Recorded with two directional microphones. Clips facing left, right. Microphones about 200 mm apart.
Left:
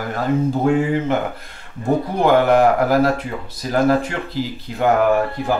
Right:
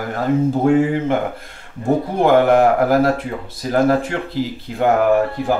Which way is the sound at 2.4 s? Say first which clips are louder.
Right 1 dB; 50° right (ahead or behind).